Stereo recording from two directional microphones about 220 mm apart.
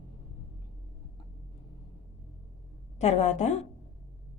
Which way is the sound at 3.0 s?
30° left (ahead or behind).